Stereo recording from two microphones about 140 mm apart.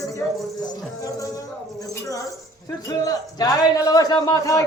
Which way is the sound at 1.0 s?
25° left (ahead or behind).